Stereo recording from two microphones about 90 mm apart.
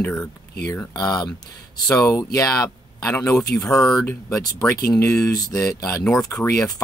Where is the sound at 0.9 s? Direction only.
45° left (ahead or behind).